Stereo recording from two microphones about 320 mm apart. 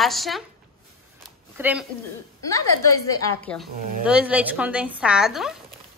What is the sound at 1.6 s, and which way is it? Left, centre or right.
Speech, centre.